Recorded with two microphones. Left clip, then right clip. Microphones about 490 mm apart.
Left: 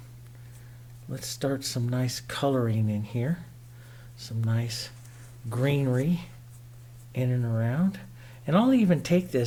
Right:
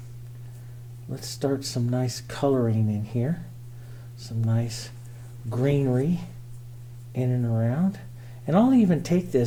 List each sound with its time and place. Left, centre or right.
1.1 s speech: left